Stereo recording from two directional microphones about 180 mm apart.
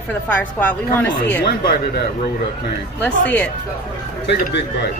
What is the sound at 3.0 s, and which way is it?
Speech, 10° left (ahead or behind).